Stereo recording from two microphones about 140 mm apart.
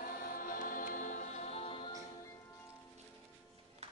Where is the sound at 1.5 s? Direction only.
40° left (ahead or behind).